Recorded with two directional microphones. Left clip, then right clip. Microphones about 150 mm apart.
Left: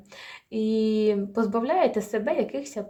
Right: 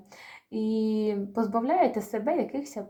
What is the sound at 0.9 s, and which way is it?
Speech, 40° left (ahead or behind).